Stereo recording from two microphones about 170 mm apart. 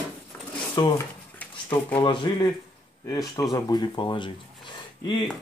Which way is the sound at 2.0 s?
30° left (ahead or behind).